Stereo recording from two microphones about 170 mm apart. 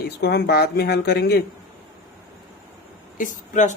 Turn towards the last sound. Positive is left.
turn(degrees=50)  # may be behind; listen again after turning